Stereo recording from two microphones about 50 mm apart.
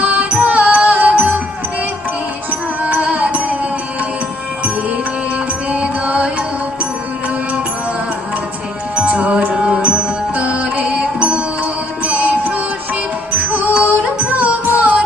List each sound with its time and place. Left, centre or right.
0.0 s music: right
2.5 s music: right
5.7 s music: right
9.0 s music: right